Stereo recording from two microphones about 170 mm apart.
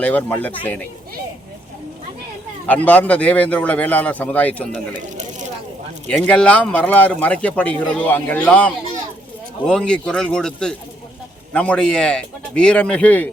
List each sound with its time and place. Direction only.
0.0 s speech: 10° left (ahead or behind)
2.6 s speech: 10° left (ahead or behind)
4.9 s a sound: 45° right (ahead or behind)
6.1 s speech: 5° left (ahead or behind)